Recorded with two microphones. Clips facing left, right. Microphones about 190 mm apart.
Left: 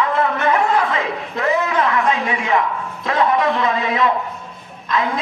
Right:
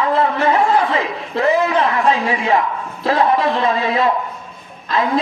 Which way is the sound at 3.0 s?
30° right (ahead or behind).